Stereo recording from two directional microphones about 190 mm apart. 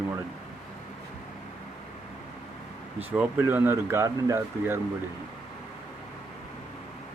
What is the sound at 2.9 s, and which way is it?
Speech, 10° right (ahead or behind).